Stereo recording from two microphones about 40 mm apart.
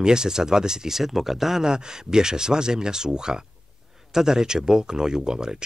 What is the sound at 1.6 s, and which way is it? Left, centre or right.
Speech, centre.